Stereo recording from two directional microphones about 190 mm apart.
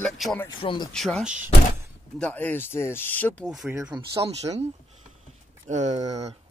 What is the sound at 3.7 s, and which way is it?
Speech, 20° right (ahead or behind).